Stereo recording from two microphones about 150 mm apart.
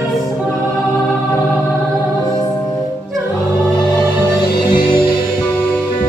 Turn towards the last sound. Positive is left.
turn(degrees=65)  # may be behind; listen again after turning